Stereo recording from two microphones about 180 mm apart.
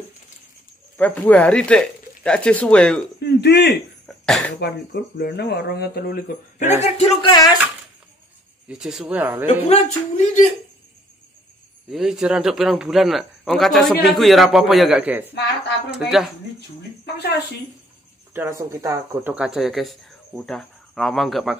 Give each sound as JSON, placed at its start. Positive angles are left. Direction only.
{"t": 0.9, "sound": "speech", "side_deg": 10}
{"t": 3.2, "sound": "speech", "side_deg": 65}
{"t": 6.8, "sound": "speech", "side_deg": 35}
{"t": 7.2, "sound": "speech", "side_deg": 20}
{"t": 8.6, "sound": "speech", "side_deg": -5}
{"t": 9.5, "sound": "speech", "side_deg": 40}
{"t": 11.9, "sound": "speech", "side_deg": 0}
{"t": 17.0, "sound": "a woman's voice", "side_deg": 65}
{"t": 18.3, "sound": "speech", "side_deg": -15}
{"t": 19.3, "sound": "speech", "side_deg": -5}